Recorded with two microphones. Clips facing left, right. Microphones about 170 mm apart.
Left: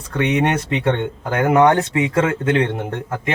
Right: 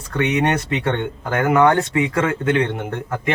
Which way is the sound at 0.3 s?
20° left (ahead or behind).